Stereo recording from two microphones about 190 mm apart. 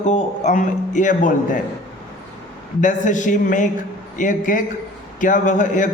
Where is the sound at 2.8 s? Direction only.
40° left (ahead or behind).